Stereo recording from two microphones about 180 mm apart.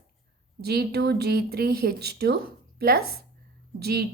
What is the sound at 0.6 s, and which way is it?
Speech, 60° right (ahead or behind).